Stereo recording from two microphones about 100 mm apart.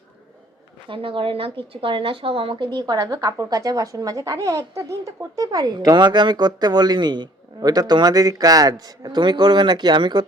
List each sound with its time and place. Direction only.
0.9 s speech: 60° right (ahead or behind)